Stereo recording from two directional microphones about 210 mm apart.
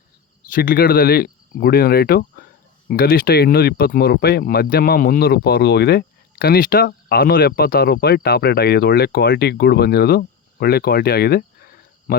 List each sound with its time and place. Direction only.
0.5 s speech: 45° left (ahead or behind)